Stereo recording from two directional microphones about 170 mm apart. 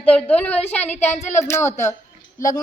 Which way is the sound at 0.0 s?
10° left (ahead or behind).